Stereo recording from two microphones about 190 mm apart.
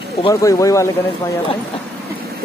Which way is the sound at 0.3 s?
15° left (ahead or behind).